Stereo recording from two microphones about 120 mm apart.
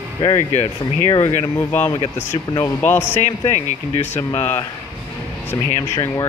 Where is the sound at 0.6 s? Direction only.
50° left (ahead or behind).